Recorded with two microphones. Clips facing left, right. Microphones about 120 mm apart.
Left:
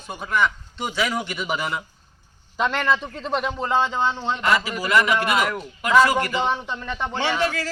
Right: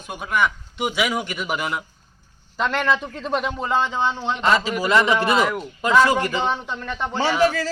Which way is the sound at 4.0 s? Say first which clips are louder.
Right 1 dB; 5° right (ahead or behind).